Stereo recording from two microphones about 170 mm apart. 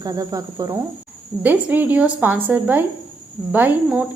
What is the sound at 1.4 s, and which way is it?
A woman's voice, 10° right (ahead or behind).